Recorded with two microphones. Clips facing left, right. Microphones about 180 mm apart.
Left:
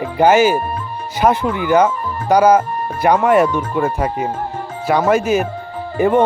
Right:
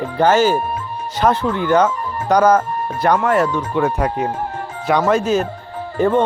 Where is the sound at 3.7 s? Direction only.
5° left (ahead or behind).